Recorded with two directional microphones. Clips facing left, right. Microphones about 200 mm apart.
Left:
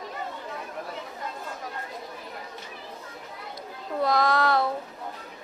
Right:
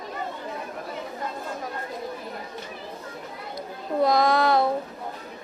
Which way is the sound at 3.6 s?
15° right (ahead or behind).